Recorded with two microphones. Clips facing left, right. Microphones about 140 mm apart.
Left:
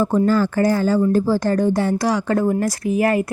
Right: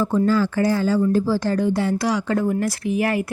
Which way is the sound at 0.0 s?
50° left (ahead or behind).